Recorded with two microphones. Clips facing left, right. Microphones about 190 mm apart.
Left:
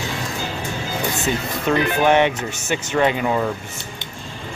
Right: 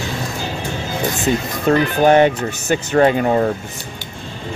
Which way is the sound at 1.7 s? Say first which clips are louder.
Right 4 dB; 40° right (ahead or behind).